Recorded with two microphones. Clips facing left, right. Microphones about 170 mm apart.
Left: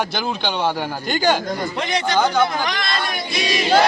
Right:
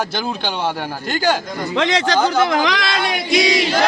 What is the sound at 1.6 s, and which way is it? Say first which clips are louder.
Choir: right 9 dB; 90° right.